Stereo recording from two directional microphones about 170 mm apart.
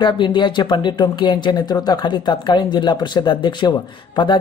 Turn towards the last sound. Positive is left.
turn(degrees=25)  # may be behind; listen again after turning